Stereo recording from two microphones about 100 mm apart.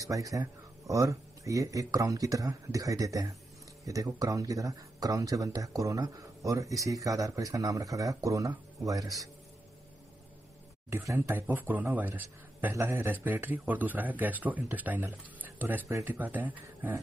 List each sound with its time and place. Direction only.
0.0 s speech: 35° right (ahead or behind)
10.9 s speech: 25° right (ahead or behind)